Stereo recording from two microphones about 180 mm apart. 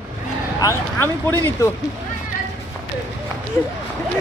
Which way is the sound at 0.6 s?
15° left (ahead or behind).